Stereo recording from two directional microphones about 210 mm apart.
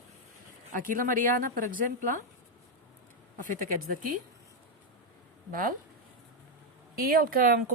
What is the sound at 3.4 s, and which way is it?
Speech, 40° right (ahead or behind).